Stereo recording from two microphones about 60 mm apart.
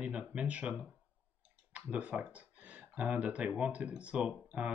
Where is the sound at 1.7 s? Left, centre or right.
Right.